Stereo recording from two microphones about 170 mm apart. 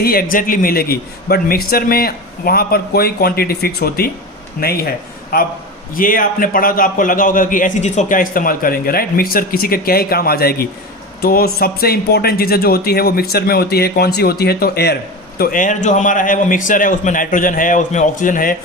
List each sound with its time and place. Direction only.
0.0 s a man's voice: 60° left (ahead or behind)
15.4 s a man's voice: 55° left (ahead or behind)